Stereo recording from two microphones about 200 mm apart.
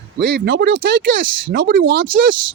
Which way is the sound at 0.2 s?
55° right (ahead or behind).